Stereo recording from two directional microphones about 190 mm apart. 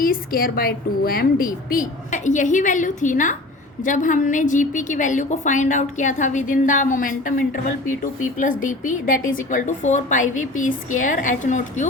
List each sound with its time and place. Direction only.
0.0 s a woman's voice: 50° left (ahead or behind)